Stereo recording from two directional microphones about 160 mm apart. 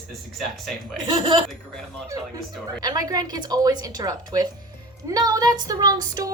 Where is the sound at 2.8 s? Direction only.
25° right (ahead or behind).